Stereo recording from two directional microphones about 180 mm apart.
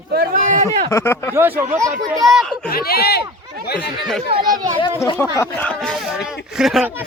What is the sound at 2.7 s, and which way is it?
Speech, 60° left (ahead or behind).